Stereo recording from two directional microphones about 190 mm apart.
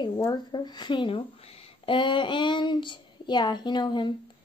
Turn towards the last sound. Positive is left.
turn(degrees=25)  # may be behind; listen again after turning